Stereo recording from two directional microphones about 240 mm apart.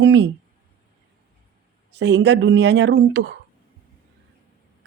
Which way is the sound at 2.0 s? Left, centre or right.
Right.